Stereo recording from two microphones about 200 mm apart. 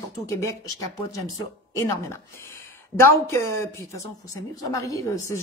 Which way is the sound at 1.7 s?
15° left (ahead or behind).